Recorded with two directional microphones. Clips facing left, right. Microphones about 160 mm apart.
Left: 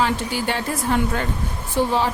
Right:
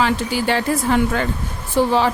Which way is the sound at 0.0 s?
90° right.